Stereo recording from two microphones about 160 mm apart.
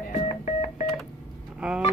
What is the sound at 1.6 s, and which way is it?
Vehicle, 5° right (ahead or behind).